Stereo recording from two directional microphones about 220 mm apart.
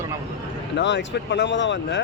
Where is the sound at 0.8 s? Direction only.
55° left (ahead or behind).